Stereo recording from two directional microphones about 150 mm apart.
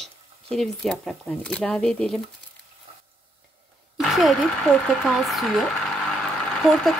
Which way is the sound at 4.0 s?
Centre (ahead or behind).